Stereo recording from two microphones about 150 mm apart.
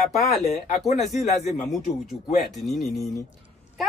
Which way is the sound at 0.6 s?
50° left (ahead or behind).